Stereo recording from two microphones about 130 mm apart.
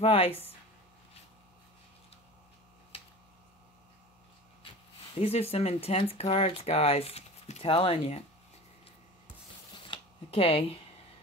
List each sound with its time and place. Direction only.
0.0 s speech: 50° left (ahead or behind)
5.1 s speech: 50° left (ahead or behind)
9.8 s a sound: 45° left (ahead or behind)